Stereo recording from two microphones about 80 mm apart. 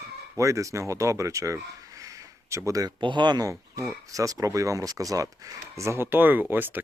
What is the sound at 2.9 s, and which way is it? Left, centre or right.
Speech, right.